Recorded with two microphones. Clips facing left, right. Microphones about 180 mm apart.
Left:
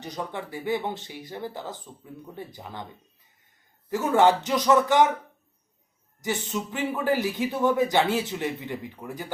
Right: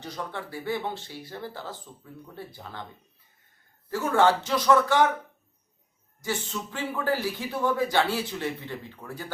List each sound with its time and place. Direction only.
0.0 s a man's voice: 15° left (ahead or behind)
3.8 s speech: 15° left (ahead or behind)
6.2 s a man's voice: 20° left (ahead or behind)